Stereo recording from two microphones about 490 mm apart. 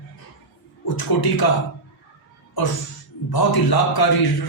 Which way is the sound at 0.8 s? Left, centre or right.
Left.